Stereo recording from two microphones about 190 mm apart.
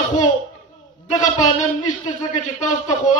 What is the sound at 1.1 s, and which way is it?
A man's voice, 40° left (ahead or behind).